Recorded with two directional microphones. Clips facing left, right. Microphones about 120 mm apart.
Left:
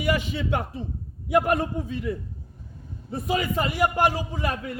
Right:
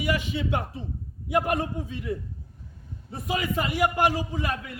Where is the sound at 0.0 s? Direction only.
50° left (ahead or behind).